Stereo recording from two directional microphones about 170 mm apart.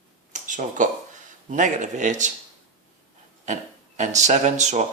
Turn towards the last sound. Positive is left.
turn(degrees=-45)  # may be behind; listen again after turning